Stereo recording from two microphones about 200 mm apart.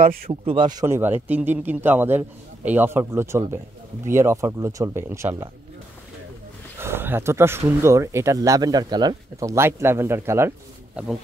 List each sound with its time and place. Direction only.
0.0 s speech: 45° right (ahead or behind)
0.3 s speech: 25° right (ahead or behind)
6.8 s speech: 10° right (ahead or behind)